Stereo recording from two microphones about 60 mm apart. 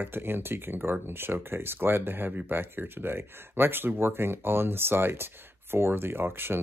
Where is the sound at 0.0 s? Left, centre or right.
Right.